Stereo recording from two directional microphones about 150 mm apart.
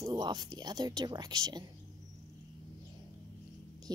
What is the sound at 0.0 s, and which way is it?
Speech, 25° right (ahead or behind).